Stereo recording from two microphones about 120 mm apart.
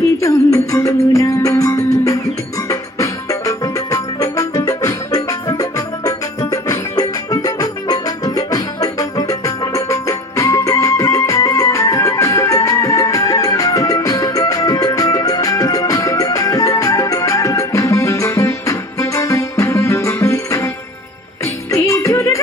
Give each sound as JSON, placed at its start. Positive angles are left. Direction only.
{"t": 0.2, "sound": "music", "side_deg": 25}